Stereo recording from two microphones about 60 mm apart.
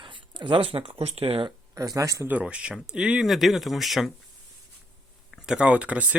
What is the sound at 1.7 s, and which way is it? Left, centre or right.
Speech, right.